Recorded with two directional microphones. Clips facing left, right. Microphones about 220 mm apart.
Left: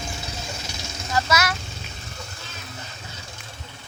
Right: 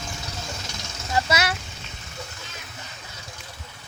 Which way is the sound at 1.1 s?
30° right (ahead or behind).